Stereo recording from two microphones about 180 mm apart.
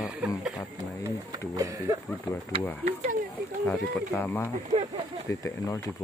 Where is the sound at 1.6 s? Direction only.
20° right (ahead or behind).